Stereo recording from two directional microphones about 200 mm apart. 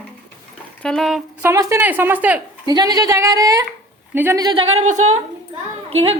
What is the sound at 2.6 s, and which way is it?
Speech, 20° right (ahead or behind).